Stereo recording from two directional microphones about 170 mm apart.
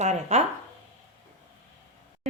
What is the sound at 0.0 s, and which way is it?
Speech, 40° right (ahead or behind).